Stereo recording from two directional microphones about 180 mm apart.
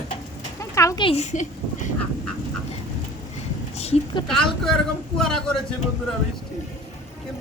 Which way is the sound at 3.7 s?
35° left (ahead or behind).